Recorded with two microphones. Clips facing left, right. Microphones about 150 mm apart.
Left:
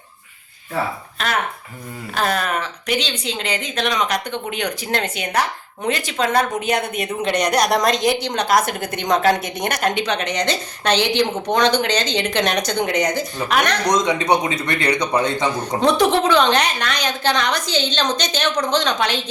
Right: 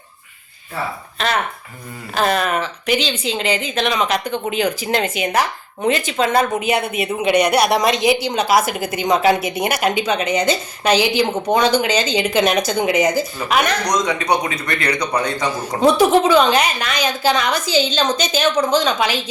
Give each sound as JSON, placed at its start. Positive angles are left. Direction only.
{"t": 2.1, "sound": "a woman's voice", "side_deg": 0}
{"t": 13.8, "sound": "a man's voice", "side_deg": 25}
{"t": 15.8, "sound": "a woman's voice", "side_deg": -5}